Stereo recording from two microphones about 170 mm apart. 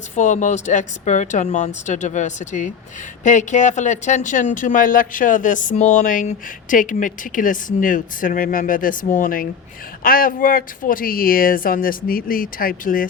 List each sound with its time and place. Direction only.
0.2 s speech: 45° left (ahead or behind)